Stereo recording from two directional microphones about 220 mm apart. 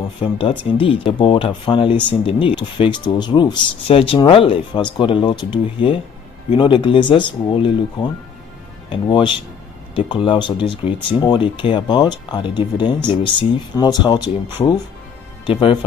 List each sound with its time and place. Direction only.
0.2 s speech: 25° left (ahead or behind)